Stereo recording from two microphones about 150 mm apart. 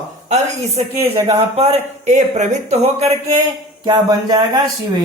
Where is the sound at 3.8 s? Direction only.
25° right (ahead or behind).